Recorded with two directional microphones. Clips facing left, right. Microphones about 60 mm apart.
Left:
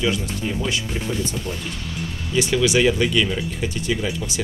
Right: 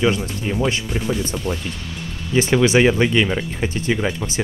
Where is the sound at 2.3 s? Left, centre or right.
Right.